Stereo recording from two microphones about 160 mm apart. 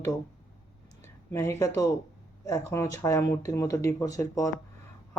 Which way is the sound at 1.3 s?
15° left (ahead or behind).